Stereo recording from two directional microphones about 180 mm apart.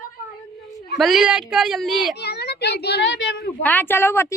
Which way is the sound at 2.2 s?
65° left (ahead or behind).